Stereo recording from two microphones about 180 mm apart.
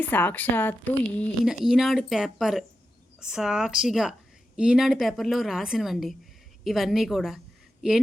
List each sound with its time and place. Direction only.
0.0 s a woman's voice: 10° left (ahead or behind)
1.5 s a woman's voice: centre (ahead or behind)